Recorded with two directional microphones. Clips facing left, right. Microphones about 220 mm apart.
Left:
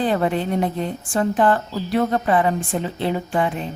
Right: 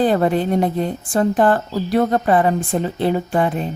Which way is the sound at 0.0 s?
40° right (ahead or behind).